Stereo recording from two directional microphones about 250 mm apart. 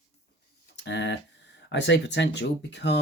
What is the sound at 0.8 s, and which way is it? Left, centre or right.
Speech, left.